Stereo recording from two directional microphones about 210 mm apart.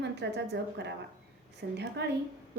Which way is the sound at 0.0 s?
55° right (ahead or behind).